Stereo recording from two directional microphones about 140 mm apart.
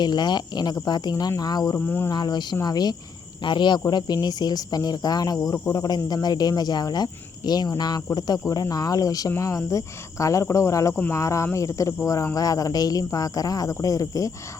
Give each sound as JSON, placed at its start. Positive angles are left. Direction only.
{"t": 0.0, "sound": "speech", "side_deg": 30}